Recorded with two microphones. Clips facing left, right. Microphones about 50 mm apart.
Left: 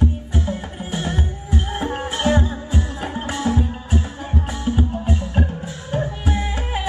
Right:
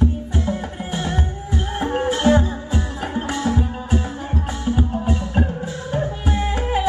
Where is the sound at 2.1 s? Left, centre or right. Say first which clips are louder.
Right 4 dB; left.